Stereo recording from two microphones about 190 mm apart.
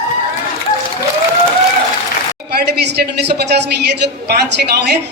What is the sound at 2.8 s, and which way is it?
Speech, 60° right (ahead or behind).